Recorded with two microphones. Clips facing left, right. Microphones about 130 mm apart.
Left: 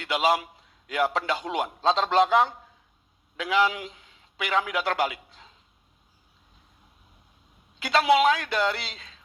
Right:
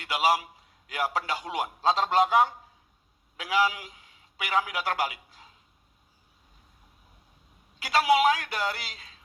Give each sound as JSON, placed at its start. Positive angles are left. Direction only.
{"t": 0.0, "sound": "a man's voice", "side_deg": 25}
{"t": 7.8, "sound": "a man's voice", "side_deg": 25}